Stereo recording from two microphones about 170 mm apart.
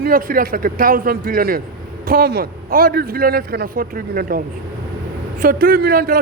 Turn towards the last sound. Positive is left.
turn(degrees=-60)  # may be behind; listen again after turning